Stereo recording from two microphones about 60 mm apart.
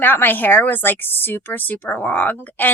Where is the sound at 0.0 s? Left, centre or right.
Left.